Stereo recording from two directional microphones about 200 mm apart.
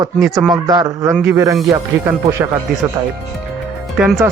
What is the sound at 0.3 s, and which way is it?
A man's voice, 20° right (ahead or behind).